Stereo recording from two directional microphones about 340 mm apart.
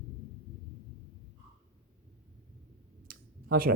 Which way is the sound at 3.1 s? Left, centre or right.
Right.